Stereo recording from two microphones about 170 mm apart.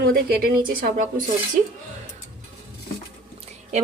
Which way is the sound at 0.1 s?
60° right (ahead or behind).